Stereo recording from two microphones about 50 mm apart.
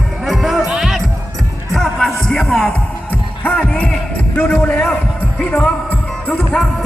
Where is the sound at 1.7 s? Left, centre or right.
Centre.